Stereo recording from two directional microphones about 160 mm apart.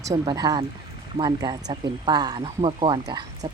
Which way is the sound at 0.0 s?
25° right (ahead or behind).